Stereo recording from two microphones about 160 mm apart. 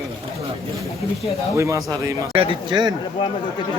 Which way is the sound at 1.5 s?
20° right (ahead or behind).